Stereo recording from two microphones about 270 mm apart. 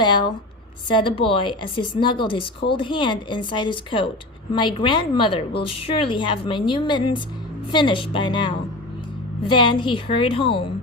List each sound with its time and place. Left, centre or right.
0.0 s a woman's voice: centre